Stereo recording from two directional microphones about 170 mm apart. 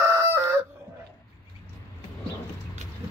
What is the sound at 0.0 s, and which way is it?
Chicken, 15° right (ahead or behind).